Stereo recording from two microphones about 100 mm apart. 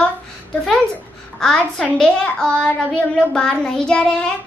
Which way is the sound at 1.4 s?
5° left (ahead or behind).